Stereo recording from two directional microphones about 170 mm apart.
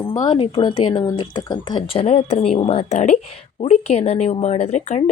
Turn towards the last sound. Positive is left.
turn(degrees=40)  # may be behind; listen again after turning